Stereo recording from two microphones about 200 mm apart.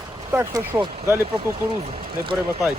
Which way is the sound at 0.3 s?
10° right (ahead or behind).